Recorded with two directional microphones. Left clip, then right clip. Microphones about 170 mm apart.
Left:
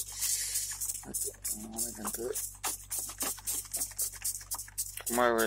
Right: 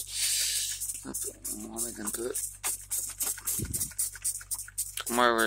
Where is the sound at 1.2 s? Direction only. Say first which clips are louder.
Right 1 dB; 15° right (ahead or behind).